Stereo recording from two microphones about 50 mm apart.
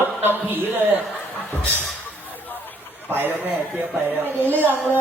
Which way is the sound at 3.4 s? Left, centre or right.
Right.